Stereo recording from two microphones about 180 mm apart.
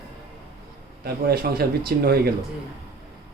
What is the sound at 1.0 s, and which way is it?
Speech, 60° right (ahead or behind).